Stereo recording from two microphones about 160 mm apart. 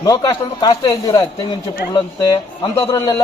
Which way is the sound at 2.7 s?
20° left (ahead or behind).